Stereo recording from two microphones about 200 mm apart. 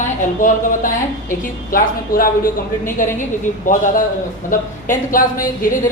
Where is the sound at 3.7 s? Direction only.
40° left (ahead or behind).